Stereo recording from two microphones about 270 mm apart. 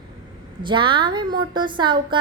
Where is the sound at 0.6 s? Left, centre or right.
Centre.